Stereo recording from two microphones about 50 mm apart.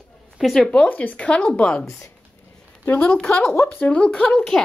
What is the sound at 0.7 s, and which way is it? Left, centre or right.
Speech, left.